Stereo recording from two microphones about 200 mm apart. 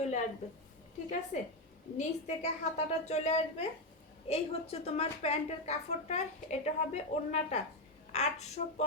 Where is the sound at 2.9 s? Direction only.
35° left (ahead or behind).